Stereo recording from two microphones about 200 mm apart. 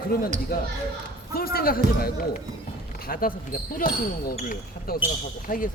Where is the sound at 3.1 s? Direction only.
45° left (ahead or behind).